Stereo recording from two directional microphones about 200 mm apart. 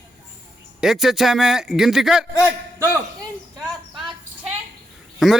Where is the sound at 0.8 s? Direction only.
Centre (ahead or behind).